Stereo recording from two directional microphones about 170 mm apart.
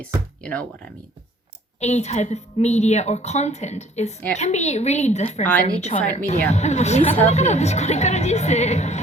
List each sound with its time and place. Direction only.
1.8 s a woman's voice: 40° left (ahead or behind)